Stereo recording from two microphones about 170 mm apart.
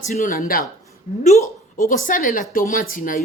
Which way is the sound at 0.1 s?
55° left (ahead or behind).